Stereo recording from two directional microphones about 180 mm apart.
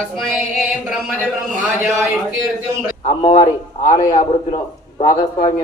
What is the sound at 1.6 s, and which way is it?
Speech, 10° right (ahead or behind).